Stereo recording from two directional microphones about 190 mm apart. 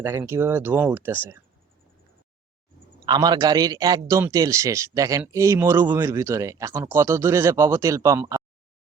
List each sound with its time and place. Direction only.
0.0 s speech: 15° right (ahead or behind)
3.1 s a man's voice: 20° right (ahead or behind)